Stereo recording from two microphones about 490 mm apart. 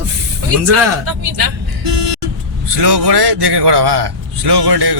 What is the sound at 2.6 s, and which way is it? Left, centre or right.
A man's voice, right.